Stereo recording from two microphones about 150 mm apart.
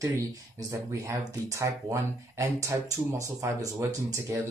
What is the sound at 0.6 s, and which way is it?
Speech, 20° right (ahead or behind).